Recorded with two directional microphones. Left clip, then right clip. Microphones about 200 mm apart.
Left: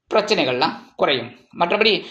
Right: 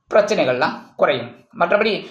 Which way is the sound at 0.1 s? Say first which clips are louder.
Right 3 dB; 25° left (ahead or behind).